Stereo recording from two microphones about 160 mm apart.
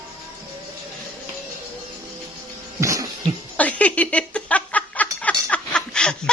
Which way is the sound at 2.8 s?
20° right (ahead or behind).